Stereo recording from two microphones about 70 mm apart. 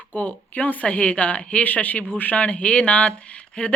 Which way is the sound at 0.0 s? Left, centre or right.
Left.